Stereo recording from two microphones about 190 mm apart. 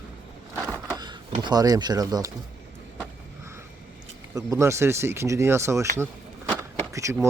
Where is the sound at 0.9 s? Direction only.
20° right (ahead or behind).